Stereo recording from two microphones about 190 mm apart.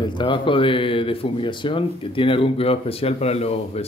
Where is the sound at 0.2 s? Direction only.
25° left (ahead or behind).